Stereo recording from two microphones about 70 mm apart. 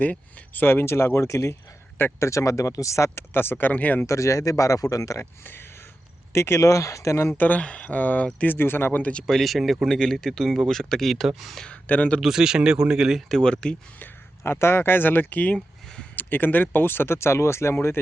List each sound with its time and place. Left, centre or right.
0.0 s speech: left
3.3 s speech: left
4.0 s speech: left
5.2 s speech: left
7.3 s speech: left
9.2 s speech: centre
11.6 s speech: centre
12.2 s speech: centre
13.2 s speech: centre
14.0 s speech: left
15.5 s speech: centre
16.1 s speech: left